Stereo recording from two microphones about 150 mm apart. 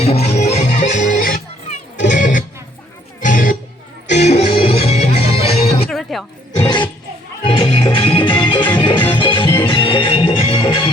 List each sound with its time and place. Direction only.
0.0 s music: 45° left (ahead or behind); by 3.6 s 65° left (ahead or behind)
4.1 s music: 50° left (ahead or behind)
5.9 s a sound: centre (ahead or behind)
6.6 s music: 30° left (ahead or behind)